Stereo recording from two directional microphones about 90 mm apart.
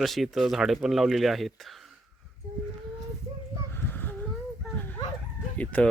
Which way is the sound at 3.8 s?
20° left (ahead or behind).